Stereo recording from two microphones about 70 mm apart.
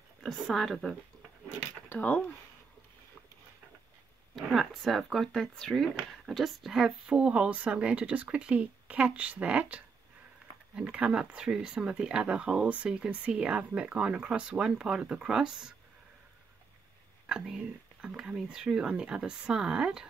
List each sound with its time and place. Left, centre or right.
0.2 s speech: centre
1.9 s speech: left
4.4 s speech: centre
17.3 s speech: centre